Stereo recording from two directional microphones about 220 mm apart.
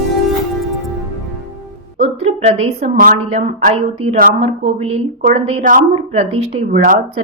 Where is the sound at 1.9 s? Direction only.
30° right (ahead or behind).